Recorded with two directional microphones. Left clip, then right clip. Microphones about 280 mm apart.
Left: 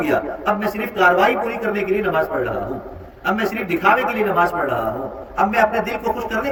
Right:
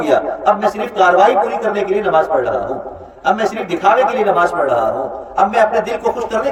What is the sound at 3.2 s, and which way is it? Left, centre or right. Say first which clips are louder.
A man's voice: right 5 dB; right.